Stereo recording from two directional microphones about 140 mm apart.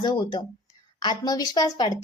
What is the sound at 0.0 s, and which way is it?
A woman's voice, 30° left (ahead or behind).